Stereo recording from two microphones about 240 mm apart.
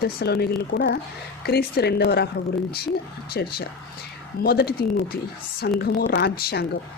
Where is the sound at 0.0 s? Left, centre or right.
Left.